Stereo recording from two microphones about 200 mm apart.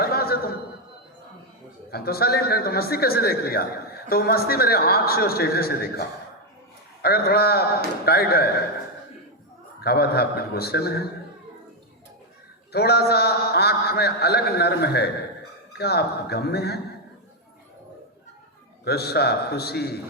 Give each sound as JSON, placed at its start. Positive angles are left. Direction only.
{"t": 0.0, "sound": "a sound", "side_deg": 50}
{"t": 1.9, "sound": "a man's voice", "side_deg": 50}
{"t": 9.8, "sound": "a man's voice", "side_deg": 50}
{"t": 12.7, "sound": "a man's voice", "side_deg": 55}
{"t": 18.9, "sound": "a man's voice", "side_deg": 55}